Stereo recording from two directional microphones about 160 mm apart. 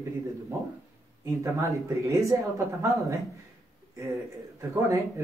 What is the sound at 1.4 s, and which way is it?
Speech, 20° right (ahead or behind).